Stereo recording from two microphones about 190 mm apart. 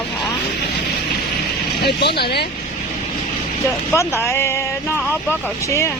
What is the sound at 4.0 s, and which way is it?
Speech, 15° left (ahead or behind).